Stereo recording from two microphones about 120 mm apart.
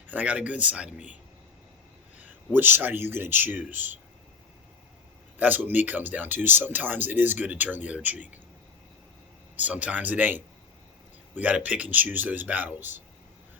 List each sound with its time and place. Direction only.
0.1 s speech: 10° right (ahead or behind)
2.1 s speech: 15° right (ahead or behind)
5.4 s speech: 15° right (ahead or behind)
9.6 s speech: 10° right (ahead or behind)